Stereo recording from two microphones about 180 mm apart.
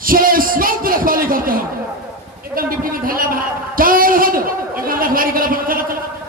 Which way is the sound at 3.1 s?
50° right (ahead or behind).